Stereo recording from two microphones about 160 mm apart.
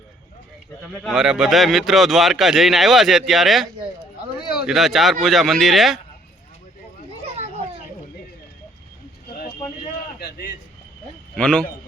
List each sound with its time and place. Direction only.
1.0 s speech: 5° right (ahead or behind)
10.2 s a sound: 80° left
11.3 s a man's voice: 5° left (ahead or behind)